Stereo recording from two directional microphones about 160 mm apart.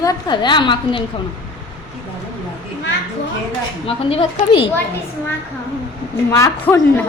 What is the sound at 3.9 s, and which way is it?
Speech, 35° left (ahead or behind).